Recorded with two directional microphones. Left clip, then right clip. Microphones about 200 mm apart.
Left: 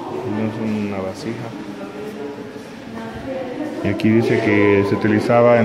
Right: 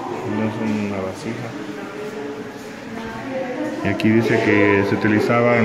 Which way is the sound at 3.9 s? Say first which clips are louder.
Left 1 dB; 10° left (ahead or behind).